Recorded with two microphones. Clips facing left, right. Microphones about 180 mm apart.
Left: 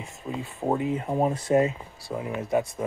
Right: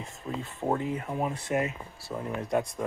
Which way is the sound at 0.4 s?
10° left (ahead or behind).